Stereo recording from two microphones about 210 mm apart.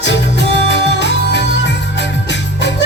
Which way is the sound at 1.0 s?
55° left (ahead or behind).